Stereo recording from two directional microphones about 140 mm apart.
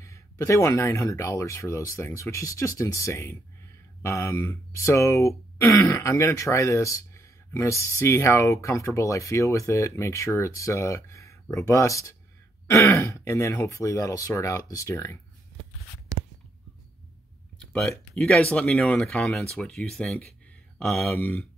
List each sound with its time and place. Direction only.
0.0 s speech: 20° left (ahead or behind)
18.1 s speech: 5° left (ahead or behind)
21.1 s speech: 15° left (ahead or behind)